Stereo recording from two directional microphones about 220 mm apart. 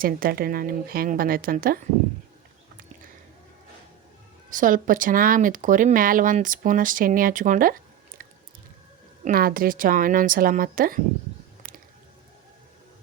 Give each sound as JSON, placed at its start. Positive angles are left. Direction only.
{"t": 0.0, "sound": "speech", "side_deg": -40}
{"t": 4.4, "sound": "speech", "side_deg": -35}
{"t": 9.2, "sound": "speech", "side_deg": -40}